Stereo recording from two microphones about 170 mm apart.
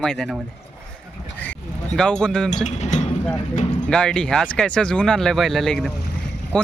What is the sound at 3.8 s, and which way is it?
Speech, 5° left (ahead or behind).